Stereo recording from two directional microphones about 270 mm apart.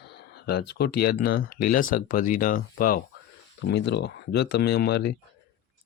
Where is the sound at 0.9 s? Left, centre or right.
Left.